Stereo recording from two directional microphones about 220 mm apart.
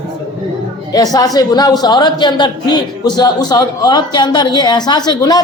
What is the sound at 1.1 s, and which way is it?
A man's voice, 15° left (ahead or behind).